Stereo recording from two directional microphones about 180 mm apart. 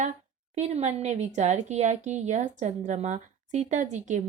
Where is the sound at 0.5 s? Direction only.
35° right (ahead or behind).